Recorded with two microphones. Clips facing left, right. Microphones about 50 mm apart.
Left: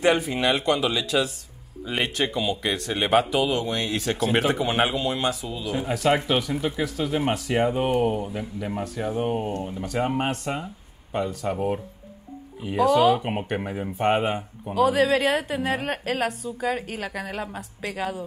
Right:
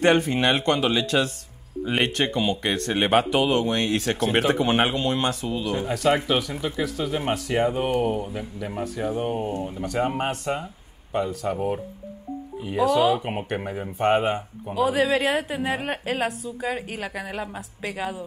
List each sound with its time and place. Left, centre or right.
0.0 s a woman's voice: centre
2.9 s a woman's voice: centre